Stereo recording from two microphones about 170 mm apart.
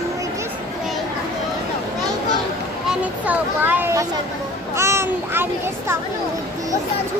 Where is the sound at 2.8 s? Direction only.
10° right (ahead or behind).